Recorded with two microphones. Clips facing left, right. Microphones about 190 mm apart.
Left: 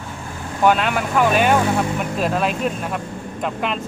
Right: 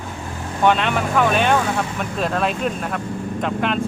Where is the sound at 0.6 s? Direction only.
5° left (ahead or behind).